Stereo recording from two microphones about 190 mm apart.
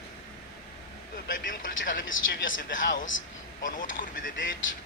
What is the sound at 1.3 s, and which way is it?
Speech, 45° left (ahead or behind).